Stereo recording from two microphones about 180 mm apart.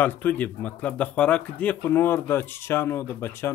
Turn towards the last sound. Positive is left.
turn(degrees=15)  # may be behind; listen again after turning